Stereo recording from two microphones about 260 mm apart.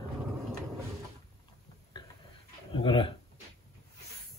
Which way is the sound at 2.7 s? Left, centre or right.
Centre.